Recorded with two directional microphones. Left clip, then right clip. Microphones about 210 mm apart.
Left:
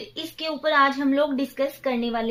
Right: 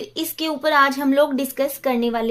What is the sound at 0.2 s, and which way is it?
A woman's voice, 50° right (ahead or behind).